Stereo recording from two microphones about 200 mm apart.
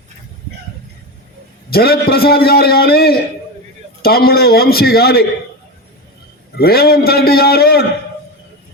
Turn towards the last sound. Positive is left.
turn(degrees=50)  # may be behind; listen again after turning